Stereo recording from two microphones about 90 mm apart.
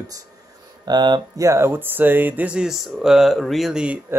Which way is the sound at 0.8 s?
55° right (ahead or behind).